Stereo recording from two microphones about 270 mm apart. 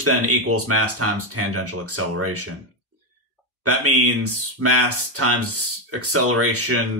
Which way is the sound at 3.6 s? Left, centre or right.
Right.